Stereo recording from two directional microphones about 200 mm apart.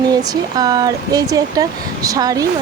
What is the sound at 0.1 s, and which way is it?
Speech, 20° right (ahead or behind).